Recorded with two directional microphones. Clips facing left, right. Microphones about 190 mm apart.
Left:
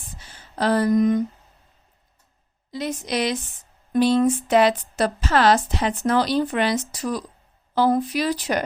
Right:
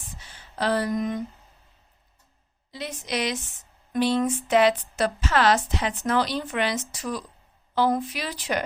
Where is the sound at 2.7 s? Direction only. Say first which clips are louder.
Left 5 dB; 40° left (ahead or behind).